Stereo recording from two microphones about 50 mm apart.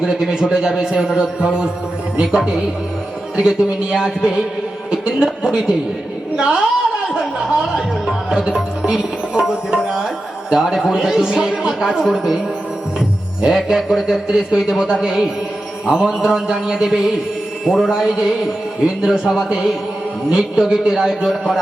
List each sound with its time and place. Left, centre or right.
0.0 s a man's voice: centre
7.6 s tabla: centre
10.5 s a man's voice: centre
17.7 s music: centre
19.0 s a man's voice: centre
21.2 s music: centre